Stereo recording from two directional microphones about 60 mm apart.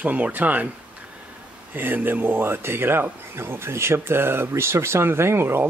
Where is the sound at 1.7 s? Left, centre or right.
Right.